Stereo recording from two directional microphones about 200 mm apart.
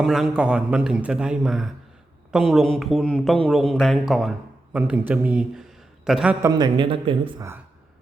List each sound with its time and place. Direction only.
0.0 s a man's voice: centre (ahead or behind)
6.4 s speech: 20° right (ahead or behind)